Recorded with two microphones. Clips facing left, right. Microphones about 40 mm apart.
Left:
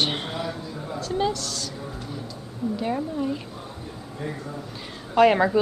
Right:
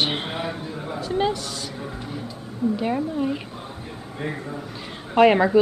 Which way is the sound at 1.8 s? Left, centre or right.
Right.